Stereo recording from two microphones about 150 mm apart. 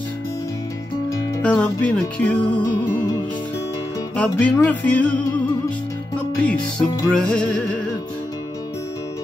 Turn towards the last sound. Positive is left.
turn(degrees=5)  # may be behind; listen again after turning